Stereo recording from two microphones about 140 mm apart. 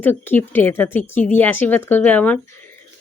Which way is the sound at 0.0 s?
15° left (ahead or behind).